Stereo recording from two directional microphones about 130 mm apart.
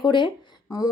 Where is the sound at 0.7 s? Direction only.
25° left (ahead or behind).